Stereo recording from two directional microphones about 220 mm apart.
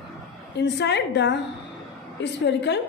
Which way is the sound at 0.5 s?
50° left (ahead or behind).